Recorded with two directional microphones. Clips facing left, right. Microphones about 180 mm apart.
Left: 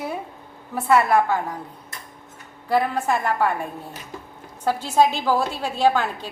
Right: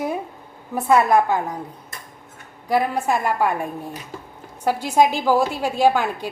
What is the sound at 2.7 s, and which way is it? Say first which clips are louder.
A woman's voice: right 1 dB; 10° right (ahead or behind).